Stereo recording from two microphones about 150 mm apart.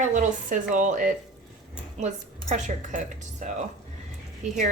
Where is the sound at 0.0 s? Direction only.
55° right (ahead or behind).